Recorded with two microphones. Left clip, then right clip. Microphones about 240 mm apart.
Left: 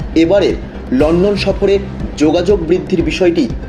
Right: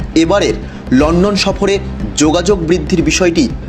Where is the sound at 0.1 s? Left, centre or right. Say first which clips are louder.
Left 1 dB; right.